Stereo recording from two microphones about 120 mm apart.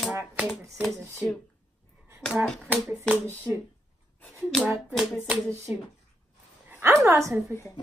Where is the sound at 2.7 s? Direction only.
25° right (ahead or behind).